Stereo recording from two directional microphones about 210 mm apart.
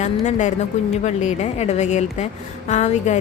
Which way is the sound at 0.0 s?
35° left (ahead or behind).